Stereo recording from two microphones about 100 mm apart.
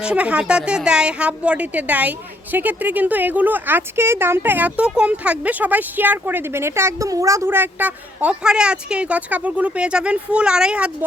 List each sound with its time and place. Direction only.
0.0 s a woman's voice: 10° right (ahead or behind)